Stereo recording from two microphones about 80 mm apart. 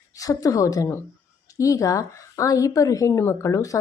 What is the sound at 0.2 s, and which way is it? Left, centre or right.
A woman's voice, left.